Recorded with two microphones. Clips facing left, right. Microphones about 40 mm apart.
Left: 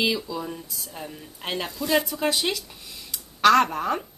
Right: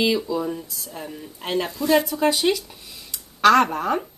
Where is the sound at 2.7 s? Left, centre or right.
Centre.